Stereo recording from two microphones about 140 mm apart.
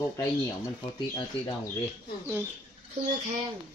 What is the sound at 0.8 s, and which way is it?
Speech, 35° left (ahead or behind).